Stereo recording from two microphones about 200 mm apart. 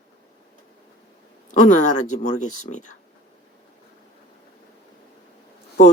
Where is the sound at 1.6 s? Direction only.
35° left (ahead or behind).